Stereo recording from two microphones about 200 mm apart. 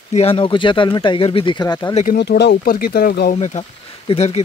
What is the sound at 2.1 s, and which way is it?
Speech, 55° left (ahead or behind).